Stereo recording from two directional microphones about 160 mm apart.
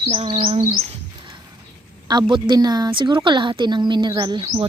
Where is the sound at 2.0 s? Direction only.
25° right (ahead or behind).